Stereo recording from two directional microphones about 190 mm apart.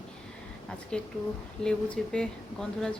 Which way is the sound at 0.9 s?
5° left (ahead or behind).